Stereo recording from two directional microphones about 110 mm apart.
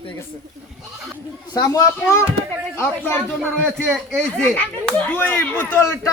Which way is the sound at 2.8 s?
20° left (ahead or behind).